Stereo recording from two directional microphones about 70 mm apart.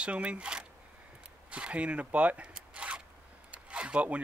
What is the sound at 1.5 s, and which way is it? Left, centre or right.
Zipper, centre.